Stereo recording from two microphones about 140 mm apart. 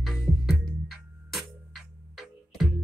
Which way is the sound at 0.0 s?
Centre (ahead or behind).